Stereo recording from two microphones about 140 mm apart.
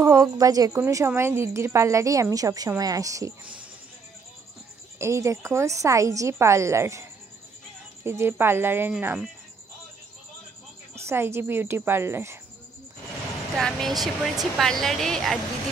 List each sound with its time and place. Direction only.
0.0 s a woman's voice: 25° right (ahead or behind)
4.9 s a woman's voice: 20° right (ahead or behind)
11.1 s a woman's voice: 20° right (ahead or behind)
13.6 s speech: 5° left (ahead or behind)